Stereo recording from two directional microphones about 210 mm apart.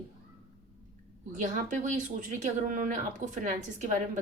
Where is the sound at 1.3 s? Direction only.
35° right (ahead or behind).